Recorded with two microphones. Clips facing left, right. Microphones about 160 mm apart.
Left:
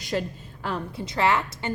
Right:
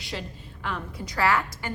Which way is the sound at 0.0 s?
45° left (ahead or behind).